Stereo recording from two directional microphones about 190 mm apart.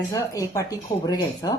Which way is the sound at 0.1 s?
15° left (ahead or behind).